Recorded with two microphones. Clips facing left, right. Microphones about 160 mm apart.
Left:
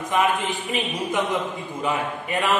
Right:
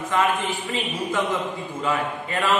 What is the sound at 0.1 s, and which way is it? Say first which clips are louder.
A man's voice: left 1 dB; 20° left (ahead or behind).